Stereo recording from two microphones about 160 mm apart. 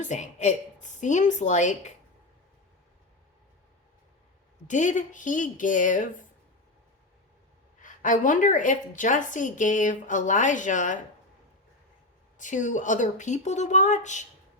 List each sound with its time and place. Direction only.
0.0 s a woman's voice: 50° left (ahead or behind)
4.7 s a woman's voice: 50° left (ahead or behind)
7.8 s a woman's voice: 55° left (ahead or behind)
12.4 s a woman's voice: 50° left (ahead or behind)